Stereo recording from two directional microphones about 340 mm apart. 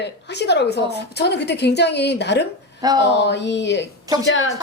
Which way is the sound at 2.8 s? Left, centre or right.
Centre.